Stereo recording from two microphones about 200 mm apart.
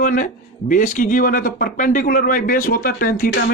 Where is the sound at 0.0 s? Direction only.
40° left (ahead or behind).